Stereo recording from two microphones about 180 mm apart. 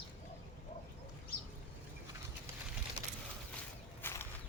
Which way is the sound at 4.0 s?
10° left (ahead or behind).